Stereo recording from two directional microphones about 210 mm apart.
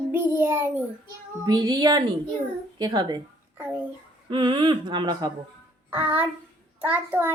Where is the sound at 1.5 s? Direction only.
20° right (ahead or behind).